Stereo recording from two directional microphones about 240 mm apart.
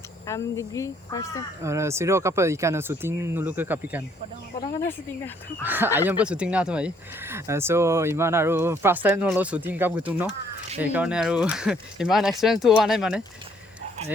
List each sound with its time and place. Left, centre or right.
0.3 s speech: centre
1.6 s speech: centre
5.6 s speech: centre